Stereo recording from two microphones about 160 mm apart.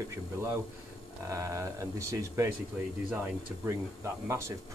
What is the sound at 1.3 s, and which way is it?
Speech, 20° right (ahead or behind).